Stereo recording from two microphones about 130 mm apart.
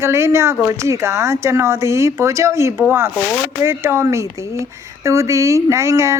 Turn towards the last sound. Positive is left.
turn(degrees=-20)  # may be behind; listen again after turning